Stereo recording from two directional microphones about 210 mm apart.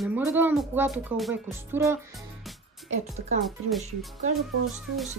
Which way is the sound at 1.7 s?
10° right (ahead or behind).